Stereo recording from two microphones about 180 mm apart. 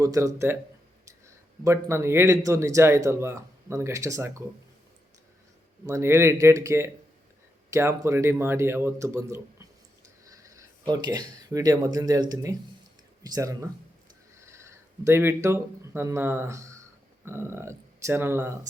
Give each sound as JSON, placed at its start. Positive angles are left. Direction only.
{"t": 0.0, "sound": "speech", "side_deg": -20}
{"t": 1.6, "sound": "speech", "side_deg": -15}
{"t": 5.9, "sound": "speech", "side_deg": -15}
{"t": 14.3, "sound": "a sound", "side_deg": -15}
{"t": 15.0, "sound": "speech", "side_deg": -15}